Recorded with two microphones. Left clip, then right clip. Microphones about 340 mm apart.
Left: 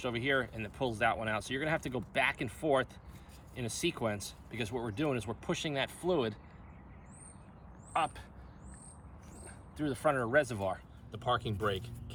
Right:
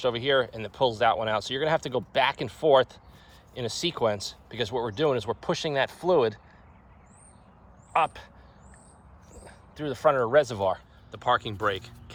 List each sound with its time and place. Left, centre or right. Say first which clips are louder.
0.0 s speech: right 8 dB; right
7.9 s speech: right 8 dB; centre
9.5 s speech: right 4 dB; centre